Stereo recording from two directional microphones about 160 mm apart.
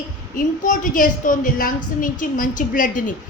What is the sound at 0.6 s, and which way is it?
A woman's voice, 55° left (ahead or behind).